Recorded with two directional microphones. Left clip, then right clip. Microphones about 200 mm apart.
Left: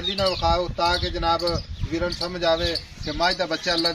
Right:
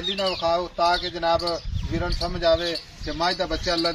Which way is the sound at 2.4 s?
40° left (ahead or behind).